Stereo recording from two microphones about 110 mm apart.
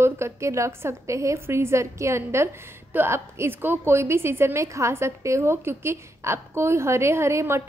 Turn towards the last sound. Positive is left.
turn(degrees=-25)  # may be behind; listen again after turning